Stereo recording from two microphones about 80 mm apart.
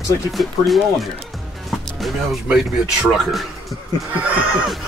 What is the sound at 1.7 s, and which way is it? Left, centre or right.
Music, centre.